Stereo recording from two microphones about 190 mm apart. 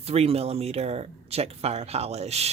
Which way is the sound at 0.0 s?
30° right (ahead or behind).